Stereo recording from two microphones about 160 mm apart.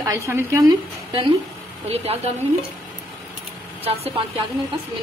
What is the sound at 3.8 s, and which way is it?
Speech, 40° right (ahead or behind).